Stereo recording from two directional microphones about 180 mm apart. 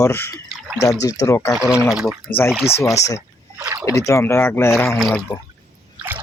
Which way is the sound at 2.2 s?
10° left (ahead or behind).